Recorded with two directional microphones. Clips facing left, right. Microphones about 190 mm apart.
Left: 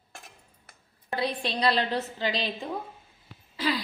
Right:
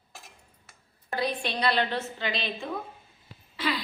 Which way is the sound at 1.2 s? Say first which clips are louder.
Even; 30° left (ahead or behind).